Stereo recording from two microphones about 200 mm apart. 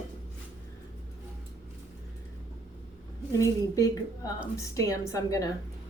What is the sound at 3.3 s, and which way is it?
A woman's voice, 15° left (ahead or behind).